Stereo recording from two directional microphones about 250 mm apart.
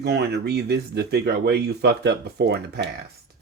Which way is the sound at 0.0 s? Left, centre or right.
Right.